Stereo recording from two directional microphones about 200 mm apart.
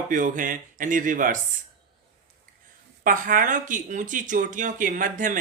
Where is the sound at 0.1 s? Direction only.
40° right (ahead or behind).